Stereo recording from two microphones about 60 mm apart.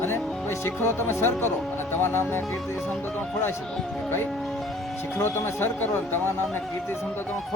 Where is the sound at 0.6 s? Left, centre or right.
Left.